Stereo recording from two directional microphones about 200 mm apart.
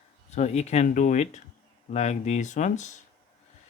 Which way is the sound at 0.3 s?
35° left (ahead or behind).